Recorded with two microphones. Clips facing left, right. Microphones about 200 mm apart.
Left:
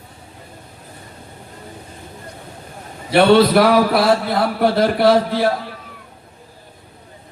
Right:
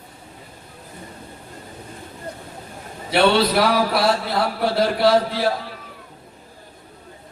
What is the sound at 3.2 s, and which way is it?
Speech, 50° left (ahead or behind).